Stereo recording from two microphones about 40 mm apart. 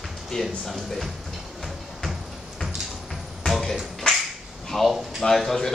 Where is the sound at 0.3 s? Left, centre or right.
Centre.